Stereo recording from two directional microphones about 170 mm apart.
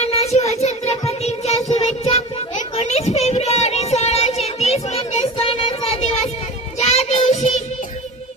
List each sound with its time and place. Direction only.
0.0 s child singing: 40° left (ahead or behind)